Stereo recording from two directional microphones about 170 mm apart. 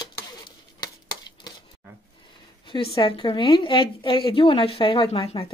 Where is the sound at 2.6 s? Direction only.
30° left (ahead or behind).